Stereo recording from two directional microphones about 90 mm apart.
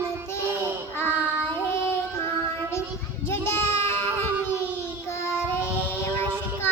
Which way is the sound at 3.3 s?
25° left (ahead or behind).